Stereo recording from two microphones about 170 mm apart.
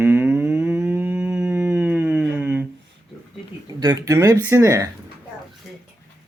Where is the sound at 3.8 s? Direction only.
20° right (ahead or behind).